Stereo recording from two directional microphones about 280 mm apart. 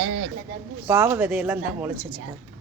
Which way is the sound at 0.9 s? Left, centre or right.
Centre.